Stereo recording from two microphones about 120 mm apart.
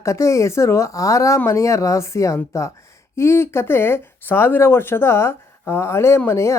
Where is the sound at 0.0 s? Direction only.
25° left (ahead or behind).